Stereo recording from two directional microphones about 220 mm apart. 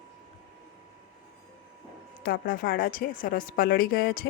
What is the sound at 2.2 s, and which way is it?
A woman's voice, 40° left (ahead or behind).